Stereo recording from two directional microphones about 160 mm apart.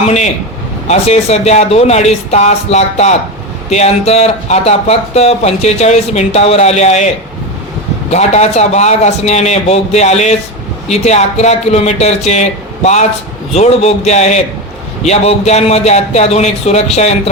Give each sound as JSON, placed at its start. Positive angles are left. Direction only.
{"t": 0.9, "sound": "speech", "side_deg": 45}
{"t": 8.1, "sound": "a man's voice", "side_deg": 45}